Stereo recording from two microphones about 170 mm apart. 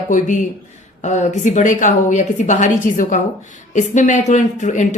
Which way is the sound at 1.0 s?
45° left (ahead or behind).